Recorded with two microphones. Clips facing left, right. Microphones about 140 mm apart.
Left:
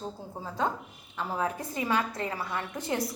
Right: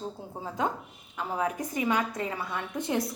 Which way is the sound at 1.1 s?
15° right (ahead or behind).